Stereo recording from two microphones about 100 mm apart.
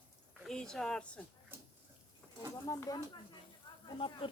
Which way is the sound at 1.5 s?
20° right (ahead or behind).